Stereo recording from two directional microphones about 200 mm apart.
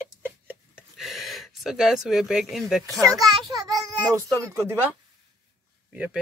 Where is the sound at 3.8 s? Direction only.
15° right (ahead or behind).